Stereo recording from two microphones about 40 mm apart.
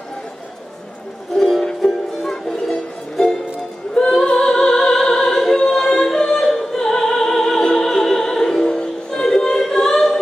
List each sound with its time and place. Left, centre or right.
1.3 s music: centre